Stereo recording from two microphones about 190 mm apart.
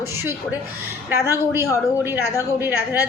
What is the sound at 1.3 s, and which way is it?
A woman's voice, 15° right (ahead or behind).